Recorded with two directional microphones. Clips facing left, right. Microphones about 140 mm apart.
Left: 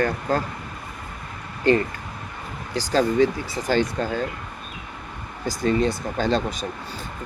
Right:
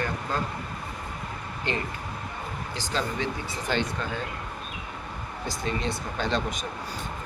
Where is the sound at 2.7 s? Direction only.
40° left (ahead or behind).